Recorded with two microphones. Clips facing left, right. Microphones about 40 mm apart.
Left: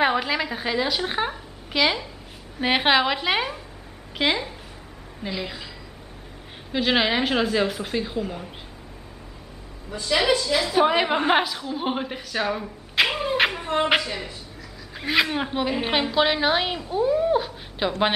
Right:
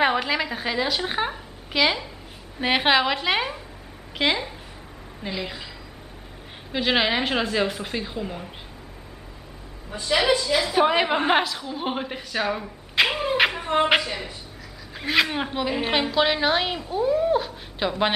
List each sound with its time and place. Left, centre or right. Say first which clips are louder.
0.0 s a woman's voice: even; centre
6.7 s a woman's voice: left 1 dB; centre
9.8 s a woman's voice: even; right
10.1 s a woman's voice: even; centre